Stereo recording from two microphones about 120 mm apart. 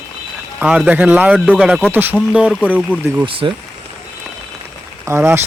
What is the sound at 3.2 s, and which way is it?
Speech, 45° right (ahead or behind).